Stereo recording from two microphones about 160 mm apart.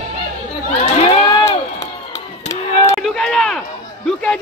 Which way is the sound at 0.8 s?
40° left (ahead or behind).